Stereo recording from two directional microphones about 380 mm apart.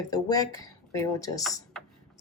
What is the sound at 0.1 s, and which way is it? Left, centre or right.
Speech, centre.